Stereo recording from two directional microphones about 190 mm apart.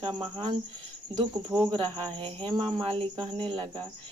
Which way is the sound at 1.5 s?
5° right (ahead or behind).